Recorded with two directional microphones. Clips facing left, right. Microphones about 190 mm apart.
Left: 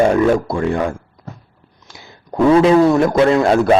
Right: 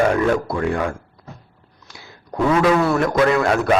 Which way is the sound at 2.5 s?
30° left (ahead or behind).